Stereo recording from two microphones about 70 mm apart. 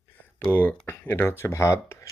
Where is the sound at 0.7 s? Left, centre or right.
Left.